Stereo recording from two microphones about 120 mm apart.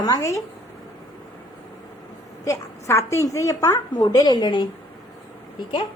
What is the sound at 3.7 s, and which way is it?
Speech, 40° left (ahead or behind).